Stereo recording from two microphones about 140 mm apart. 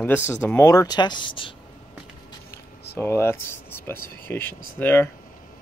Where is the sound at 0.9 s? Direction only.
35° left (ahead or behind).